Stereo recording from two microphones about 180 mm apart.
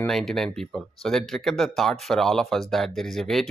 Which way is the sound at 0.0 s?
Centre (ahead or behind).